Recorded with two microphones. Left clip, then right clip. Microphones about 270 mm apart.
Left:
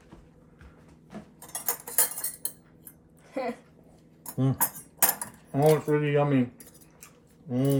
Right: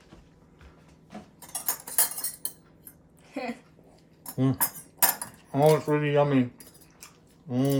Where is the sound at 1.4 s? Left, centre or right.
Centre.